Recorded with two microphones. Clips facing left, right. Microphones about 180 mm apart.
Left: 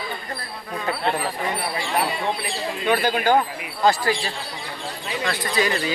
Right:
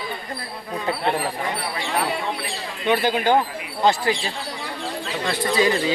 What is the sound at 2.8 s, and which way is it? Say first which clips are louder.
Speech: right 1 dB; 20° right (ahead or behind).